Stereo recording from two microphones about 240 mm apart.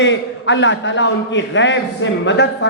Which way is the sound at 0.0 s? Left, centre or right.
Left.